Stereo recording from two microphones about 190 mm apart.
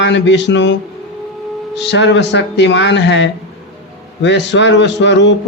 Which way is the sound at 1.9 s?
65° left (ahead or behind).